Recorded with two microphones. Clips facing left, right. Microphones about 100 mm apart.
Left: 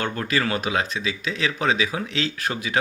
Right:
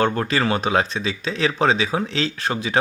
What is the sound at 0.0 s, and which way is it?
Speech, 35° right (ahead or behind).